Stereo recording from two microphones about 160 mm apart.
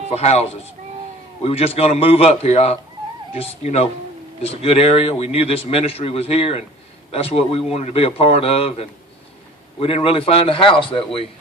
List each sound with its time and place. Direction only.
0.1 s speech: 45° left (ahead or behind)
1.5 s a man's voice: 40° left (ahead or behind)